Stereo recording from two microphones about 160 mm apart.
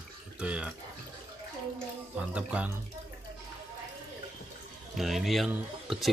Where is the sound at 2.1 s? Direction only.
10° right (ahead or behind).